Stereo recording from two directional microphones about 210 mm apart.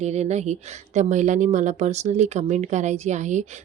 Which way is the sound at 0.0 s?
30° right (ahead or behind).